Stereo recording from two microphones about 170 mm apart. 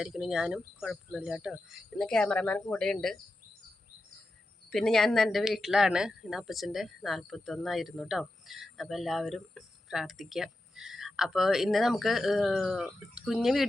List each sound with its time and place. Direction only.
0.0 s speech: centre (ahead or behind)
4.7 s speech: centre (ahead or behind)